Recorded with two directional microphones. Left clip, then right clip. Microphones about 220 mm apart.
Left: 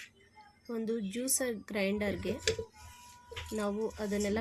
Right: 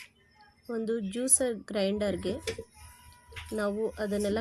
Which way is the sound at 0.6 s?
10° right (ahead or behind).